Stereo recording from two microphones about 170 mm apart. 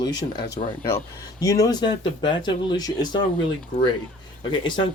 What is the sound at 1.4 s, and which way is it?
Speech, 20° left (ahead or behind).